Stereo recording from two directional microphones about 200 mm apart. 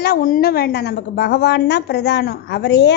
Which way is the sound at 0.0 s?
45° left (ahead or behind).